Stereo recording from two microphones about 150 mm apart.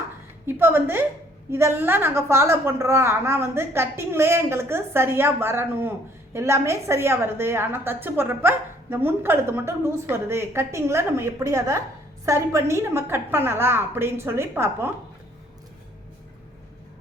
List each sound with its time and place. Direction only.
0.4 s a woman's voice: 15° right (ahead or behind)